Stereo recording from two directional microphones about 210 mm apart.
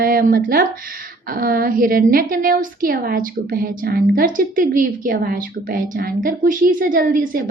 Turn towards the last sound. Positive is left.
turn(degrees=-40)  # may be behind; listen again after turning